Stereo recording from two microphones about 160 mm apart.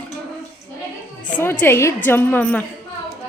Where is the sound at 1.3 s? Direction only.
10° left (ahead or behind).